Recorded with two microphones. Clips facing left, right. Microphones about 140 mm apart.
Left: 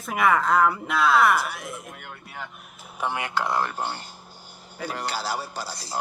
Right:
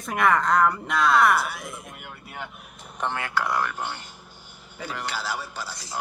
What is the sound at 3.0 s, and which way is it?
Speech, 10° left (ahead or behind).